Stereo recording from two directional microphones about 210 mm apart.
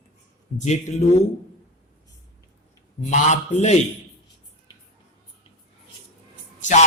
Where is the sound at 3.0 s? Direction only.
35° left (ahead or behind).